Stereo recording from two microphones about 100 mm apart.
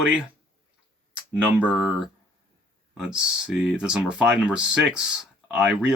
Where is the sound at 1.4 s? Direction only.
10° right (ahead or behind).